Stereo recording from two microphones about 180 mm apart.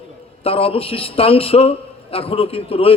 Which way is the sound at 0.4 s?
30° left (ahead or behind).